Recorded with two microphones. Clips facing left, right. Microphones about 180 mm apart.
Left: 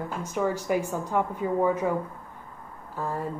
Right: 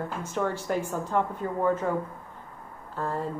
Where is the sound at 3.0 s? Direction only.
10° left (ahead or behind).